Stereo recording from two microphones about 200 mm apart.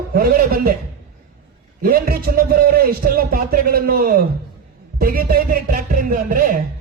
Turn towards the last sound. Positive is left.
turn(degrees=-45)  # may be behind; listen again after turning